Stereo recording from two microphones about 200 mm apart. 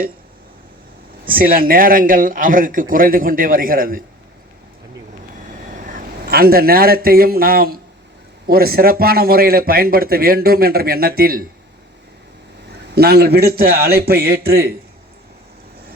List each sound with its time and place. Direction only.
1.3 s a man's voice: 45° right (ahead or behind)
5.8 s a man's voice: 45° right (ahead or behind)
12.9 s a man's voice: 55° right (ahead or behind)